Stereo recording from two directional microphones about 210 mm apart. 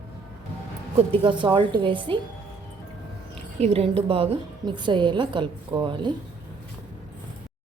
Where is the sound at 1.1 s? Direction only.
20° right (ahead or behind).